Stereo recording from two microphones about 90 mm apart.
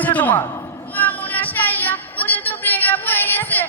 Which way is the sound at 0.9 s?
20° left (ahead or behind).